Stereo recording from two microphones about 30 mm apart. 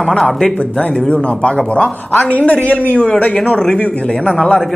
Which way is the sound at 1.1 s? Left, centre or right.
Left.